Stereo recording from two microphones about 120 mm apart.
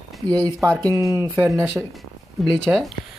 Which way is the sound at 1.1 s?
20° right (ahead or behind).